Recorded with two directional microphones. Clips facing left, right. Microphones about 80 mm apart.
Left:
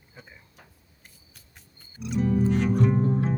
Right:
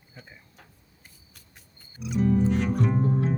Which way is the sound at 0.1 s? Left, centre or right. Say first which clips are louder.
Even; centre.